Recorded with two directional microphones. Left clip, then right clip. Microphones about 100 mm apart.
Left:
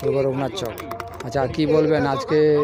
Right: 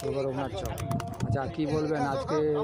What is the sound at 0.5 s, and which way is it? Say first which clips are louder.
Speech: left 6 dB; 20° left (ahead or behind).